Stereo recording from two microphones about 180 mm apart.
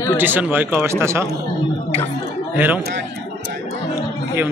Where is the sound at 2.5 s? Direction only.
10° right (ahead or behind).